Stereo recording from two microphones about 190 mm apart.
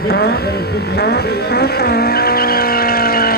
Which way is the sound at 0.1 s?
55° left (ahead or behind).